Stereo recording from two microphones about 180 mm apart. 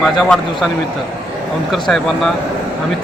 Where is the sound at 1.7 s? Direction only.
Centre (ahead or behind).